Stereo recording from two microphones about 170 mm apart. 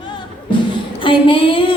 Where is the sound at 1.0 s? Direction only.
30° left (ahead or behind).